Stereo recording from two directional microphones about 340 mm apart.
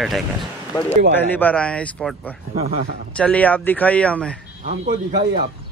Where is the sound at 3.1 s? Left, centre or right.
Centre.